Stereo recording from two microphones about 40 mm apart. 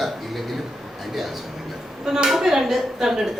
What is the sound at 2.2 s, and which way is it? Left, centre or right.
A woman's voice, centre.